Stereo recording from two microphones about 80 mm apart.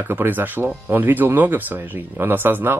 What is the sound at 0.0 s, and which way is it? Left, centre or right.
Speech, right.